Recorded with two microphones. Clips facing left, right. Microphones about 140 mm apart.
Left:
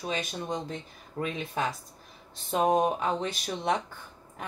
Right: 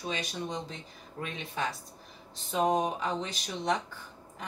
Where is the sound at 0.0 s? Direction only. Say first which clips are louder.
Left 2 dB; 45° left (ahead or behind).